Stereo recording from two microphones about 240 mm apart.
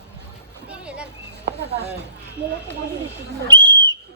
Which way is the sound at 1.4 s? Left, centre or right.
Right.